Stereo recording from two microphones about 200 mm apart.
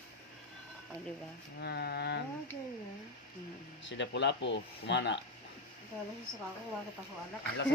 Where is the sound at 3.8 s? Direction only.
60° left (ahead or behind).